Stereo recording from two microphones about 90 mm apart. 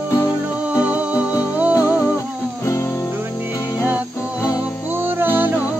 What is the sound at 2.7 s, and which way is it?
Music, 30° left (ahead or behind).